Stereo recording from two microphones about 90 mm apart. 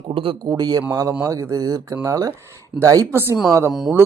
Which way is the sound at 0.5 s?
50° right (ahead or behind).